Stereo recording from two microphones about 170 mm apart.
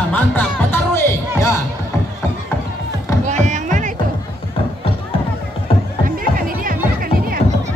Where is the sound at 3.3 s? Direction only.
45° right (ahead or behind).